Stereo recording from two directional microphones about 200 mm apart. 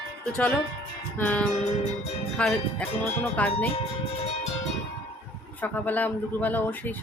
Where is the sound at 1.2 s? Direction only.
5° left (ahead or behind).